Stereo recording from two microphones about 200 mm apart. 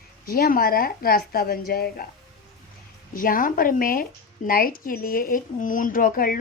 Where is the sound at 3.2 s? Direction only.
45° left (ahead or behind).